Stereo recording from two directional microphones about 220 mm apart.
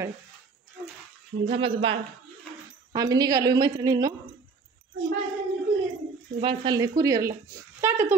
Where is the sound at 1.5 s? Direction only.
25° right (ahead or behind).